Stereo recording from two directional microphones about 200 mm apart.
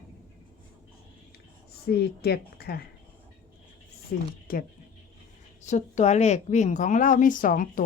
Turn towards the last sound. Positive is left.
turn(degrees=45)  # may be behind; listen again after turning